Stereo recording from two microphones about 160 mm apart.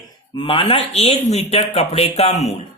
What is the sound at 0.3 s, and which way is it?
Speech, 30° left (ahead or behind).